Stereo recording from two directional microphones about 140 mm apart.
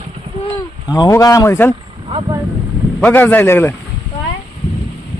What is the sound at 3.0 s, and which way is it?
Speech, 15° left (ahead or behind).